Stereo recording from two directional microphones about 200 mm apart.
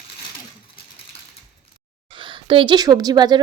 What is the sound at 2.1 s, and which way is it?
A woman's voice, 25° right (ahead or behind).